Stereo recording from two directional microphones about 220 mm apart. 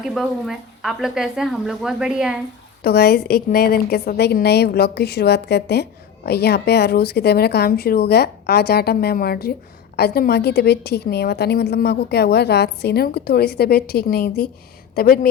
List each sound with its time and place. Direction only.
0.0 s speech: centre (ahead or behind)
2.8 s a woman's voice: 45° left (ahead or behind)